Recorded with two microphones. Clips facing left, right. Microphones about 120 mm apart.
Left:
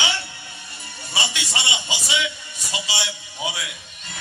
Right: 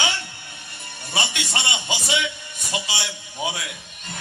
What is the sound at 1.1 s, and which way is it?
A man's voice, 55° right (ahead or behind).